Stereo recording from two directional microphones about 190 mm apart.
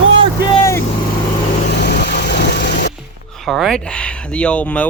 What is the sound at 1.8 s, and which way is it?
Vehicle, 65° left (ahead or behind).